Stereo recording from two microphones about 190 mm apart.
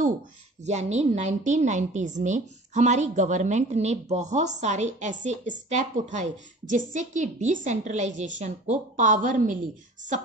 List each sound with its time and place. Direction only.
0.7 s a woman's voice: 35° right (ahead or behind)